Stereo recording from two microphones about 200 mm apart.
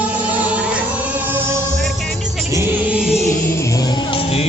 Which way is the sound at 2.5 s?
10° right (ahead or behind).